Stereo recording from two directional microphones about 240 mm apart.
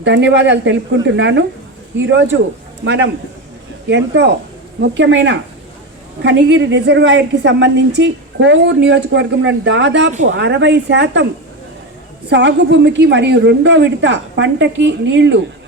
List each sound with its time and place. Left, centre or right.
0.0 s a woman's voice: right
2.8 s a woman's voice: right
12.3 s a woman's voice: right